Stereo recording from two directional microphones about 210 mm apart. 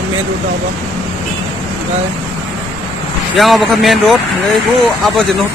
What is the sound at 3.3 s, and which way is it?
Speech, centre (ahead or behind).